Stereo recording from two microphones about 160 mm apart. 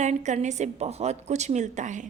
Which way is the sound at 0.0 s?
45° right (ahead or behind).